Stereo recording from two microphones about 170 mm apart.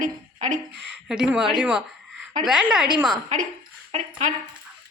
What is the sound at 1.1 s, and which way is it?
A woman's voice, 5° right (ahead or behind).